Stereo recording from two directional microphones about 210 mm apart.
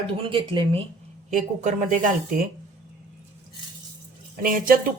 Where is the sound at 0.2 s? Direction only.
25° right (ahead or behind).